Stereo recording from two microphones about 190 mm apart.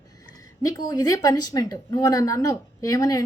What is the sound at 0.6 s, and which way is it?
A woman's voice, 20° left (ahead or behind).